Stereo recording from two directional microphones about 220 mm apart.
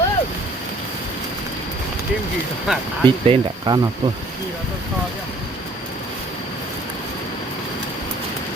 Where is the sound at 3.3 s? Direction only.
20° right (ahead or behind).